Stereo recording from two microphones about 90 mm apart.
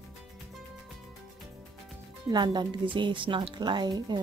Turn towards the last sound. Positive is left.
turn(degrees=-50)  # may be behind; listen again after turning